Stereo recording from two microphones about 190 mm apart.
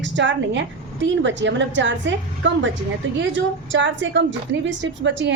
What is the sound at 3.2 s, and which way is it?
A woman's voice, 75° right (ahead or behind).